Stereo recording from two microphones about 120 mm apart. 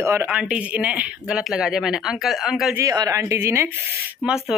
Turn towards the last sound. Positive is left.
turn(degrees=-5)  # may be behind; listen again after turning